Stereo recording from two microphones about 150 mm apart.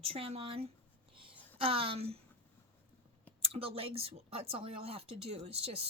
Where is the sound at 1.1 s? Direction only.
35° right (ahead or behind).